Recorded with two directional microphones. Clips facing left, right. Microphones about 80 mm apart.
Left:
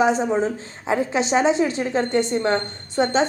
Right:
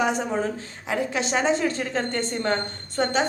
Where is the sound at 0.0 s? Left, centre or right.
Left.